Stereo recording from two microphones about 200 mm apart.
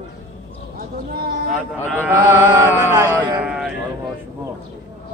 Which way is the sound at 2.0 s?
10° right (ahead or behind).